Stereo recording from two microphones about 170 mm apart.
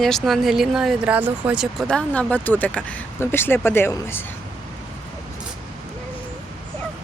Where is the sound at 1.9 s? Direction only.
5° left (ahead or behind).